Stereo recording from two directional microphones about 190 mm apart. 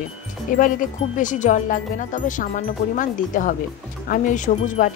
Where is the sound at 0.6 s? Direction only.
45° left (ahead or behind).